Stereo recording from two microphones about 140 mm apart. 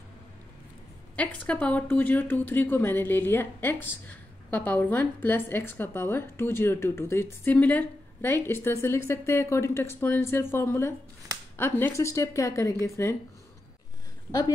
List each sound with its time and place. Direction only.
1.1 s a woman's voice: 10° left (ahead or behind)